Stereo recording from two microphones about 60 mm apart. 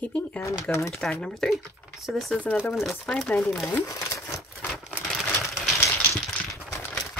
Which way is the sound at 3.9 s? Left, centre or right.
Left.